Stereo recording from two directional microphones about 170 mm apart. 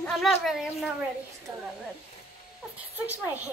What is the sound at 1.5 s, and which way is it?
Speech, 20° right (ahead or behind).